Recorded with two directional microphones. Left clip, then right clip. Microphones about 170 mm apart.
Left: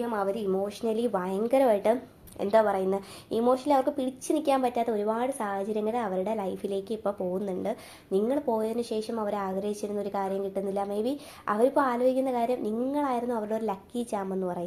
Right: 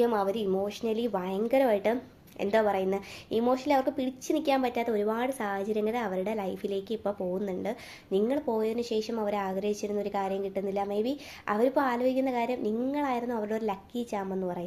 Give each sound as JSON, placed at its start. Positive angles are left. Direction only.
{"t": 0.2, "sound": "speech", "side_deg": -20}
{"t": 0.6, "sound": "a woman's voice", "side_deg": 0}